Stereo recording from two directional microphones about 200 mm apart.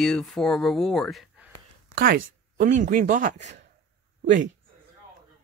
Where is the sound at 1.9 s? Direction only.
45° right (ahead or behind).